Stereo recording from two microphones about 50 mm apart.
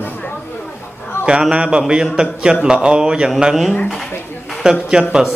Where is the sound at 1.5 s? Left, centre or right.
Right.